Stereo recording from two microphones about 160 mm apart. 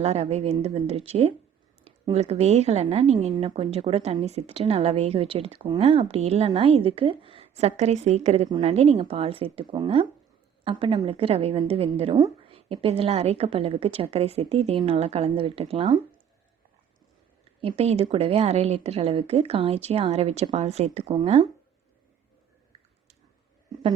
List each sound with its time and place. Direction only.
0.0 s a woman's voice: 40° right (ahead or behind)
3.3 s a woman's voice: 35° right (ahead or behind)
17.6 s a woman's voice: 35° right (ahead or behind)